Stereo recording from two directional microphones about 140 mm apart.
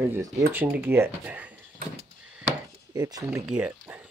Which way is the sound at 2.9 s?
25° right (ahead or behind).